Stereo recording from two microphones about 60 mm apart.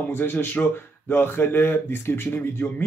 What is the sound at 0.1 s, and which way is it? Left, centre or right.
A man's voice, left.